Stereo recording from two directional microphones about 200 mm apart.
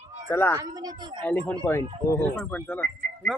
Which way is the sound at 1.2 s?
10° left (ahead or behind).